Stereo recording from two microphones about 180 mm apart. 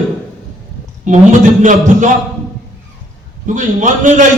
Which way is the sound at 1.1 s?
45° right (ahead or behind).